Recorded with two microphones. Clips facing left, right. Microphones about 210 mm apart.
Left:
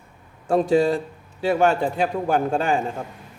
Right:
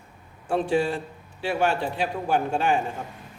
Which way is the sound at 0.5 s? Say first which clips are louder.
Left 5 dB; 40° left (ahead or behind).